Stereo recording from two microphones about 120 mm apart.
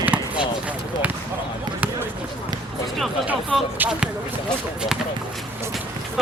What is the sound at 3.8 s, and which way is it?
Speech, 5° right (ahead or behind).